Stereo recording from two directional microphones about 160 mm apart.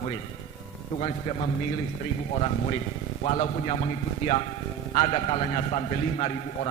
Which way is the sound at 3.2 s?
40° left (ahead or behind).